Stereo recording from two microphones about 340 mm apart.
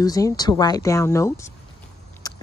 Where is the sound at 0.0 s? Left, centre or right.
Centre.